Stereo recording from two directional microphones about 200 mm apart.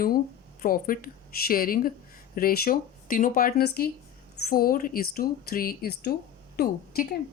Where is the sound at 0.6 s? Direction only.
45° left (ahead or behind).